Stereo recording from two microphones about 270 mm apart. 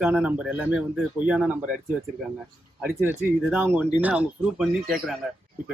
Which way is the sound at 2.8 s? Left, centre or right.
Centre.